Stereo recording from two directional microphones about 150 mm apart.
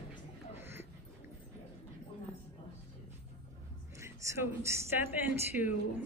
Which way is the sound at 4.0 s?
20° right (ahead or behind).